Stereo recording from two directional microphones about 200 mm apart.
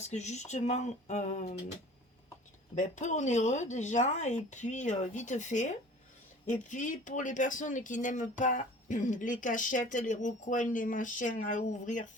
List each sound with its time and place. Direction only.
0.0 s speech: 35° left (ahead or behind)
2.7 s speech: 40° left (ahead or behind)